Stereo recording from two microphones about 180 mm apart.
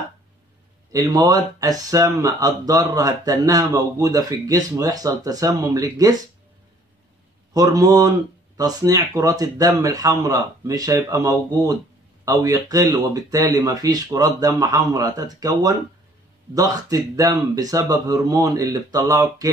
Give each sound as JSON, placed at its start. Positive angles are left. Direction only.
{"t": 0.9, "sound": "speech", "side_deg": -20}
{"t": 7.5, "sound": "speech", "side_deg": -20}